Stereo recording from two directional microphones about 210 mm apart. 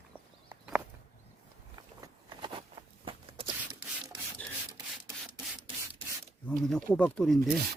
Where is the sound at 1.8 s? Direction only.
20° right (ahead or behind).